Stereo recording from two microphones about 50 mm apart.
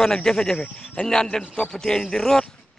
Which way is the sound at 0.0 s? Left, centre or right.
Centre.